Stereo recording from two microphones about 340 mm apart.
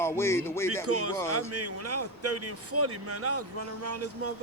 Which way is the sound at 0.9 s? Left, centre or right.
Right.